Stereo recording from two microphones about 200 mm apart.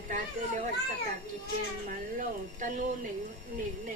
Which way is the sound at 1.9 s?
40° right (ahead or behind).